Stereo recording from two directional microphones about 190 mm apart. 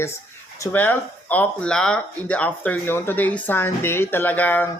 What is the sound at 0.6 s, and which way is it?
Speech, 10° left (ahead or behind).